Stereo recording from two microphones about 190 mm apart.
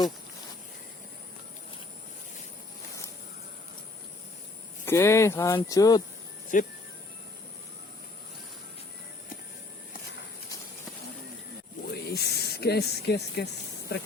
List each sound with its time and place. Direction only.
4.9 s speech: 15° left (ahead or behind)
6.5 s speech: 45° left (ahead or behind)
11.9 s a sound: 60° left (ahead or behind)